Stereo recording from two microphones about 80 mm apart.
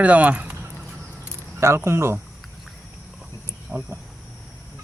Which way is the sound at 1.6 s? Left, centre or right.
Right.